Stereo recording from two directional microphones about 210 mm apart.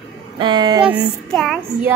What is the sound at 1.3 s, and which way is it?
Child singing, centre (ahead or behind).